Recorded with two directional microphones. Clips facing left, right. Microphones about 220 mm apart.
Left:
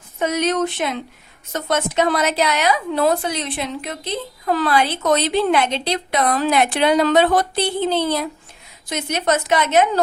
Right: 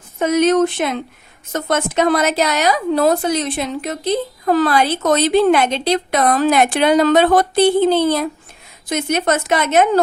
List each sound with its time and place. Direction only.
0.2 s a woman's voice: 50° right (ahead or behind)